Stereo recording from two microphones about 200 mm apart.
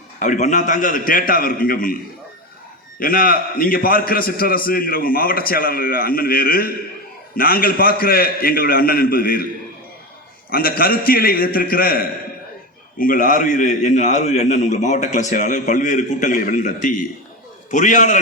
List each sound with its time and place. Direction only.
0.2 s a man's voice: 40° left (ahead or behind)
3.0 s a man's voice: 45° left (ahead or behind)
10.5 s a man's voice: 50° left (ahead or behind)